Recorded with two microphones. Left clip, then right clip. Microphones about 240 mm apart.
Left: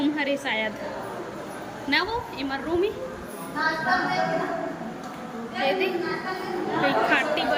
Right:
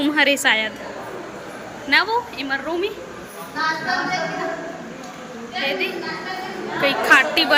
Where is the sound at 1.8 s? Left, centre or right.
Centre.